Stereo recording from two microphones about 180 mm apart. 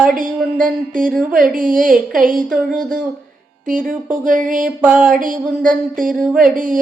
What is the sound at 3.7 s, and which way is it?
Speech, 50° right (ahead or behind).